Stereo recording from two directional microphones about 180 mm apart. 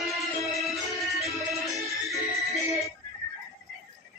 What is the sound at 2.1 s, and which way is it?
Music, 15° left (ahead or behind).